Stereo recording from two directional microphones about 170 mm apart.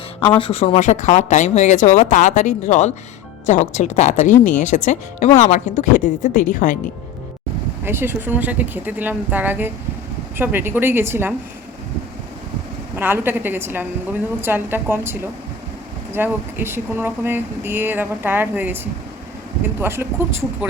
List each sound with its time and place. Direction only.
0.3 s speech: 35° left (ahead or behind); by 6.7 s 50° left (ahead or behind)
7.9 s speech: 15° right (ahead or behind)
13.0 s speech: 10° right (ahead or behind)
19.8 s speech: 15° right (ahead or behind)